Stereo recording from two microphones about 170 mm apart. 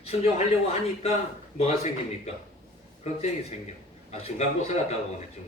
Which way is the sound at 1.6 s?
40° left (ahead or behind).